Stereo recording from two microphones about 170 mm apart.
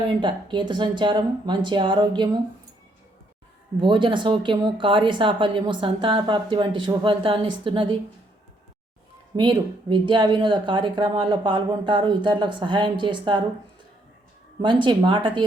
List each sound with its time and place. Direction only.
0.2 s speech: 25° right (ahead or behind)
3.8 s speech: 30° right (ahead or behind)
9.3 s speech: 30° right (ahead or behind)
14.6 s speech: 25° right (ahead or behind)